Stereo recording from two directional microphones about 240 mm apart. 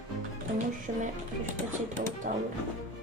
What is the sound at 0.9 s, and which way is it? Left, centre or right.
Music, right.